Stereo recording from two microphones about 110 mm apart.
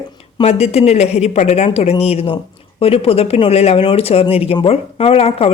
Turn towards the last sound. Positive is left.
turn(degrees=60)  # may be behind; listen again after turning